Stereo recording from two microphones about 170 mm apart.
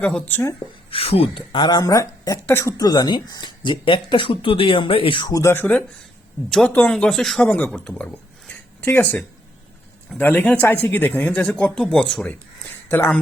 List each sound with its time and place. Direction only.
0.0 s speech: 5° left (ahead or behind)
0.9 s speech: 35° left (ahead or behind)
5.4 s speech: 15° left (ahead or behind)